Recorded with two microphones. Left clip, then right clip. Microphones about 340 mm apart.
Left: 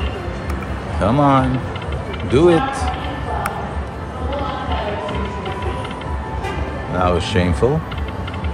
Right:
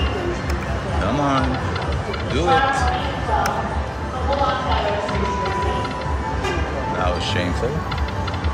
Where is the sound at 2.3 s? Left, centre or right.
Centre.